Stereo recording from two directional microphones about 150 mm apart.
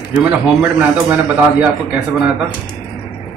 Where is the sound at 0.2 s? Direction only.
10° right (ahead or behind).